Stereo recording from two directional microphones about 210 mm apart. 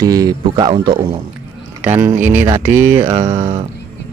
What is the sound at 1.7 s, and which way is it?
Speech, 10° right (ahead or behind).